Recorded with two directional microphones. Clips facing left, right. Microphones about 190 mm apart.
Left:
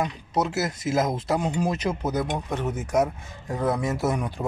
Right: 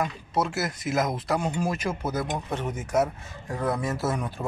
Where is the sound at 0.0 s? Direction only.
20° left (ahead or behind).